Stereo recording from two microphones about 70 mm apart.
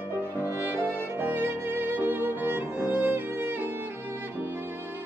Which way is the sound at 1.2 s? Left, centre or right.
Right.